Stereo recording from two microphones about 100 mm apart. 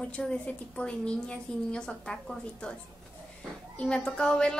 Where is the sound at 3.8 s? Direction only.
10° left (ahead or behind).